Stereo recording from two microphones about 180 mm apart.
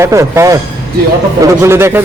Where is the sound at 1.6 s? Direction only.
15° right (ahead or behind).